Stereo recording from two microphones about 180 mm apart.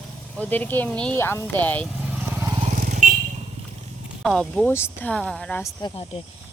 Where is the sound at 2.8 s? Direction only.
45° right (ahead or behind).